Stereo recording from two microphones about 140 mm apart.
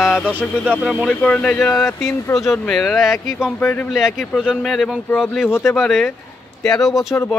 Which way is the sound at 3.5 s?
10° left (ahead or behind).